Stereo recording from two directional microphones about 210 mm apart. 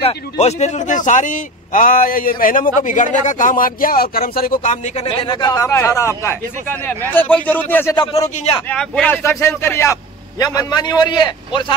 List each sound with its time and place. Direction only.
0.0 s speech: 30° left (ahead or behind); by 7.9 s 10° left (ahead or behind)
7.9 s a man's voice: 20° left (ahead or behind)
8.6 s a man's voice: 5° left (ahead or behind); by 11.6 s 20° left (ahead or behind)